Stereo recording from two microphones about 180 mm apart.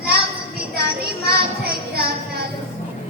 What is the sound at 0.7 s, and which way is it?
Music, 60° right (ahead or behind).